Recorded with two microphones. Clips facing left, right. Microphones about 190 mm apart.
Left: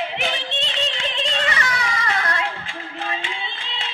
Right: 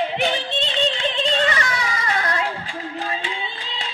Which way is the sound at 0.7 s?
35° right (ahead or behind).